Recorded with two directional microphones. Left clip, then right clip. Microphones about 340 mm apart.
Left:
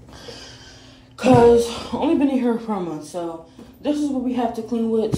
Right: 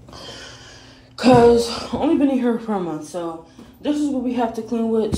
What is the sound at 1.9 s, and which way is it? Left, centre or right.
A woman's voice, centre.